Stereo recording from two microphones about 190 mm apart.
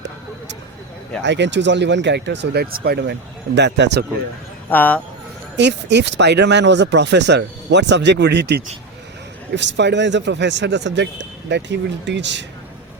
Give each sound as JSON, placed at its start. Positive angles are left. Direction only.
{"t": 1.2, "sound": "speech", "side_deg": -70}
{"t": 4.7, "sound": "speech", "side_deg": 10}
{"t": 5.5, "sound": "speech", "side_deg": -65}